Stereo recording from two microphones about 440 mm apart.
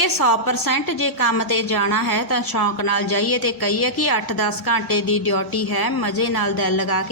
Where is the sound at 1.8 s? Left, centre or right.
Left.